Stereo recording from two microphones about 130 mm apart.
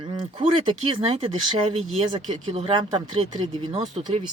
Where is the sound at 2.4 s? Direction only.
45° right (ahead or behind).